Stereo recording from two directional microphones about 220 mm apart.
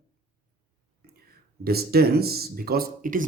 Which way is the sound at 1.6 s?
45° right (ahead or behind).